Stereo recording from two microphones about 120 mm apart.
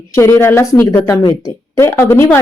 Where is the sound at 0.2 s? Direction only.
20° left (ahead or behind).